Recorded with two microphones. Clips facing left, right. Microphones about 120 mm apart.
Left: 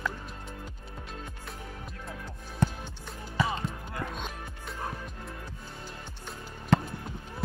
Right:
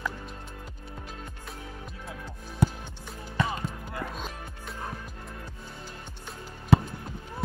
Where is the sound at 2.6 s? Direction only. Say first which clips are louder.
Right 2 dB; 10° right (ahead or behind).